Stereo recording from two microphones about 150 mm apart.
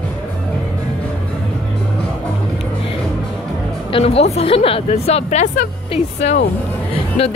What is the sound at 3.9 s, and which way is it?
A woman's voice, 40° left (ahead or behind).